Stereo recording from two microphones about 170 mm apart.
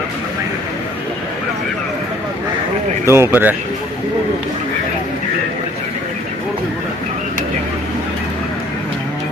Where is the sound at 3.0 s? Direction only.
15° right (ahead or behind).